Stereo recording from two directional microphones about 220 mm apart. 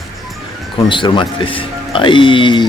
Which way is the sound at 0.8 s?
20° left (ahead or behind).